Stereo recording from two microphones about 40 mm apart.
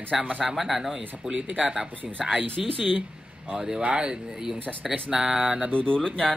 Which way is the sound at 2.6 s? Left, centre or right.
Centre.